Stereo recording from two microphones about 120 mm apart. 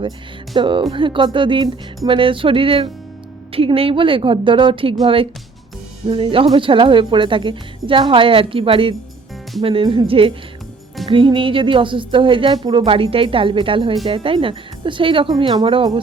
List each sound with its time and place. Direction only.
0.5 s a woman's voice: 45° right (ahead or behind)